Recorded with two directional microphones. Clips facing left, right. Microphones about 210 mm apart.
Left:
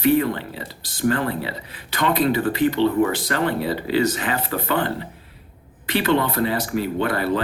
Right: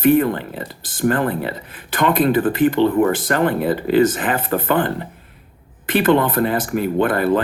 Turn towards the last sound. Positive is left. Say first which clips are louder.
# right 5 dB
turn(degrees=-50)  # may be behind; listen again after turning